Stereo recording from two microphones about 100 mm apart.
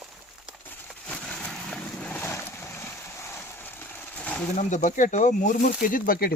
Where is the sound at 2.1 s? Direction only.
20° left (ahead or behind).